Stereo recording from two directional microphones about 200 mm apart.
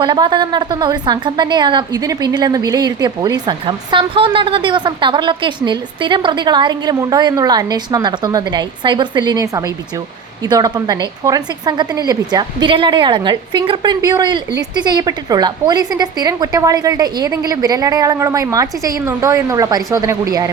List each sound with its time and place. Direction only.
0.0 s a woman's voice: 20° right (ahead or behind)